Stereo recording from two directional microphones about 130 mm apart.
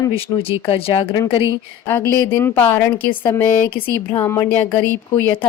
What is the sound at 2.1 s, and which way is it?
Speech, 20° left (ahead or behind).